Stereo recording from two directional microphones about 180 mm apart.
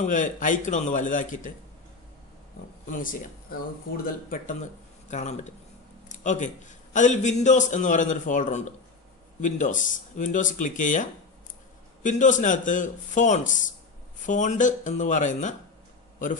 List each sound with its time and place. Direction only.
0.0 s a man's voice: 45° left (ahead or behind)
2.9 s a man's voice: 50° left (ahead or behind)
5.0 s a man's voice: 40° left (ahead or behind)